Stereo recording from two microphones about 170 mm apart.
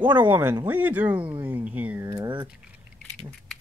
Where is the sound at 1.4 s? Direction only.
10° right (ahead or behind).